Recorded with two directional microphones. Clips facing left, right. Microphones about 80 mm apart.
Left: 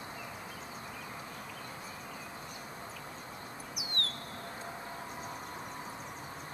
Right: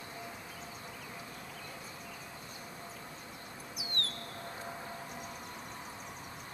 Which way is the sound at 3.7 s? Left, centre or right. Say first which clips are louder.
Left 1 dB; right.